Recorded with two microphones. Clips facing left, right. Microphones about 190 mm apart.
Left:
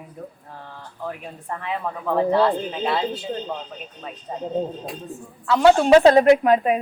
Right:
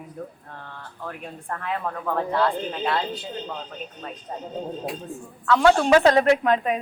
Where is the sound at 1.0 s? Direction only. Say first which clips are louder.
Left 2 dB; 5° left (ahead or behind).